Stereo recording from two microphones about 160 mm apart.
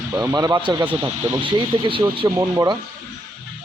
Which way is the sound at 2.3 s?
20° right (ahead or behind).